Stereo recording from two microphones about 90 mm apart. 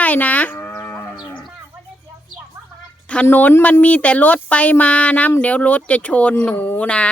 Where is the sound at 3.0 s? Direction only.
15° left (ahead or behind).